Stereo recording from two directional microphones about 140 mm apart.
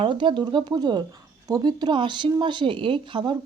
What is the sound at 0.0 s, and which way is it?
A woman's voice, 35° right (ahead or behind).